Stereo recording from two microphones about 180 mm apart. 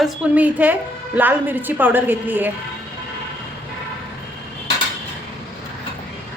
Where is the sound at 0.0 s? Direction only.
10° right (ahead or behind).